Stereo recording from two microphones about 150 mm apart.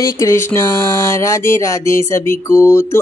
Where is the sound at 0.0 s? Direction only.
20° left (ahead or behind).